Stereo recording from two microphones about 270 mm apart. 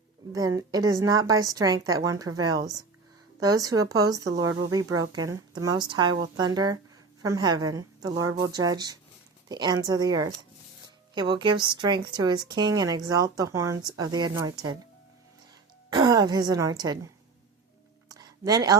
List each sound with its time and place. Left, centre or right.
0.3 s a woman's voice: centre
15.9 s a woman's voice: centre
18.1 s a sound: centre